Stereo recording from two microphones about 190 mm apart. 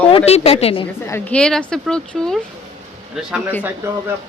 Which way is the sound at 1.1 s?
10° left (ahead or behind).